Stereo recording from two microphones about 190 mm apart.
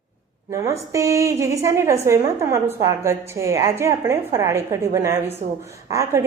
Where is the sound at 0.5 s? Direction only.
15° right (ahead or behind).